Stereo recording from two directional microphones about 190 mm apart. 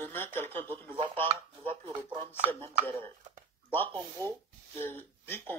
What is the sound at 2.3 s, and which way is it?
Speech, 10° left (ahead or behind).